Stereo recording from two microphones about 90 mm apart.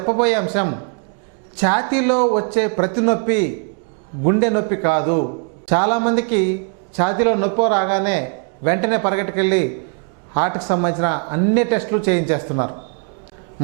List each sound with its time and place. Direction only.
0.0 s a man's voice: 20° right (ahead or behind)